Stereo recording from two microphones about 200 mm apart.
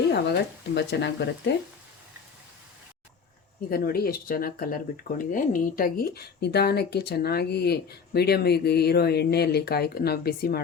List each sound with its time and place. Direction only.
0.1 s speech: 60° left (ahead or behind)
3.7 s speech: 50° left (ahead or behind)